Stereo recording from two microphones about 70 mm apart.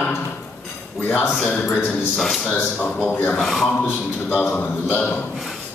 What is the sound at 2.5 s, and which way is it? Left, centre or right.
Speech, left.